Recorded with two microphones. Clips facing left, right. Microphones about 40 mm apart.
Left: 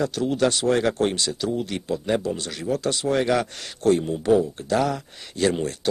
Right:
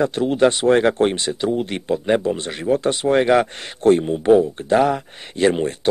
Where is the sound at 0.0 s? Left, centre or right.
Right.